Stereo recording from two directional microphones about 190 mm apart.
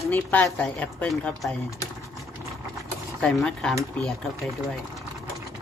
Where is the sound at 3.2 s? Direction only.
5° left (ahead or behind).